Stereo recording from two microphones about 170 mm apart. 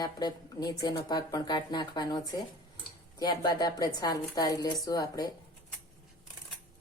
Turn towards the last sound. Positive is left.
turn(degrees=20)  # may be behind; listen again after turning